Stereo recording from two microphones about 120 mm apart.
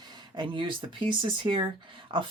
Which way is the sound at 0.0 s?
35° right (ahead or behind).